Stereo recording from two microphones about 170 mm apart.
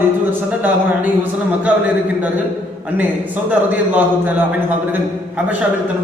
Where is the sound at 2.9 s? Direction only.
10° right (ahead or behind).